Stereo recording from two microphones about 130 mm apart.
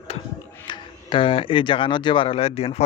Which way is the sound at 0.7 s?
40° left (ahead or behind).